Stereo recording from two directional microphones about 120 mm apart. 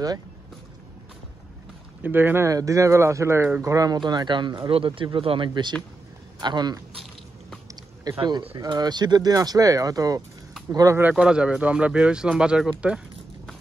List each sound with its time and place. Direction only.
2.0 s speech: 15° right (ahead or behind); by 6.8 s 35° right (ahead or behind)
8.2 s speech: 40° right (ahead or behind)
11.1 s speech: 10° right (ahead or behind)